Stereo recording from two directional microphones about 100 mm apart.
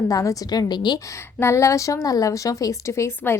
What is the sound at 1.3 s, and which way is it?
A woman's voice, 25° left (ahead or behind).